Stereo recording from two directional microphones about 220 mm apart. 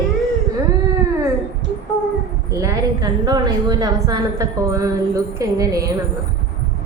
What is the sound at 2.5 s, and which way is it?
A woman's voice, 15° right (ahead or behind).